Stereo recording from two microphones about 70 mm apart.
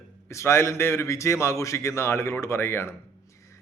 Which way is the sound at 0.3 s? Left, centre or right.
Left.